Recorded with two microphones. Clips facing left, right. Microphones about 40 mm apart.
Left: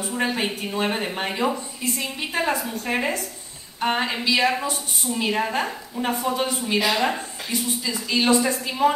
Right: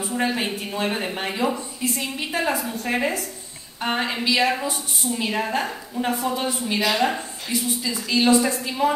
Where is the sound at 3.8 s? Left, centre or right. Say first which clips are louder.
Left 1 dB; centre.